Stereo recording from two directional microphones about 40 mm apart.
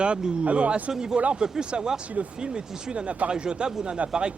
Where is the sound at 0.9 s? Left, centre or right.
Centre.